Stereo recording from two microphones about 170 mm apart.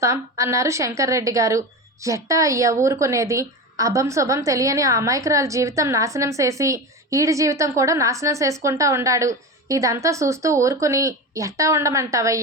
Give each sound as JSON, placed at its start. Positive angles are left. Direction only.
{"t": 0.0, "sound": "a woman's voice", "side_deg": -15}